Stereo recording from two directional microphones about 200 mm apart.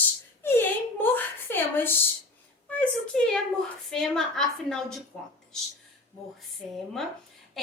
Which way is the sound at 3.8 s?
Centre (ahead or behind).